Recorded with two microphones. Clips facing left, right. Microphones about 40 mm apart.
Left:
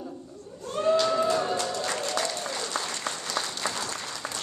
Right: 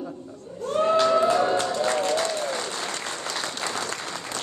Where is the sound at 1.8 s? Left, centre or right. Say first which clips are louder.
Right 6 dB; right.